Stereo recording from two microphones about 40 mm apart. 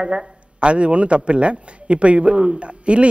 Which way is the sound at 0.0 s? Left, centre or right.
Right.